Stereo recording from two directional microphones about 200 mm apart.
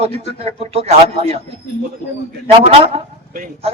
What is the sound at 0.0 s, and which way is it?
Speech, 30° right (ahead or behind).